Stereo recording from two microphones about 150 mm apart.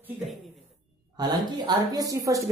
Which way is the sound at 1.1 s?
30° right (ahead or behind).